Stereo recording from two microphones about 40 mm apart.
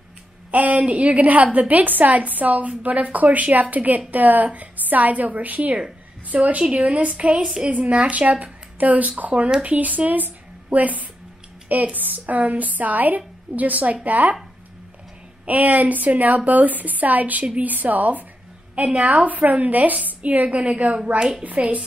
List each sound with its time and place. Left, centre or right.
0.5 s a woman's voice: right
15.4 s a woman's voice: right
20.4 s a woman's voice: right
21.2 s a woman's voice: right
21.5 s a woman's voice: right